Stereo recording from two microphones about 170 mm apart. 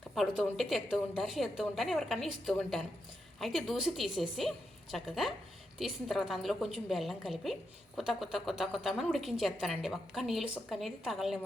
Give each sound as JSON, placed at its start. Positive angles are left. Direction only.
{"t": 0.1, "sound": "a woman's voice", "side_deg": 0}